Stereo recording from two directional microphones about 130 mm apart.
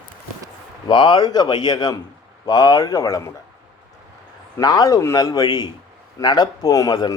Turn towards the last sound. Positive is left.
turn(degrees=30)  # may be behind; listen again after turning